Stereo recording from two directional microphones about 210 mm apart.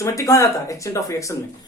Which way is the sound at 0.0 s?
15° left (ahead or behind).